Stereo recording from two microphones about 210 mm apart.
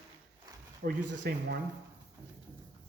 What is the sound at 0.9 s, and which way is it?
Speech, 50° right (ahead or behind).